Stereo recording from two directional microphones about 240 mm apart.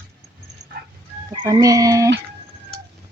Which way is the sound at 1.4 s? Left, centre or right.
Centre.